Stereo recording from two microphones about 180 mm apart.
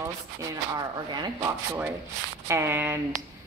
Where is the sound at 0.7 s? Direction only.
25° right (ahead or behind).